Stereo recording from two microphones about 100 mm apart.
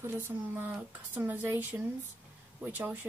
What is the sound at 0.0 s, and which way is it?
Speech, 25° right (ahead or behind).